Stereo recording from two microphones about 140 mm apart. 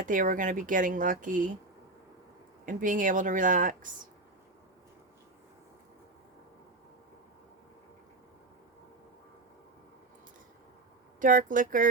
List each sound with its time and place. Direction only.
0.0 s speech: 70° right (ahead or behind)
2.6 s speech: 70° right (ahead or behind)
11.2 s speech: 70° right (ahead or behind)